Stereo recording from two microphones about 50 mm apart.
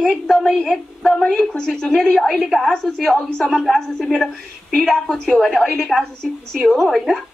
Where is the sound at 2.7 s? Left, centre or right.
Centre.